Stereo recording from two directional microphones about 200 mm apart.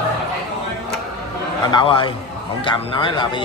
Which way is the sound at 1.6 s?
25° left (ahead or behind).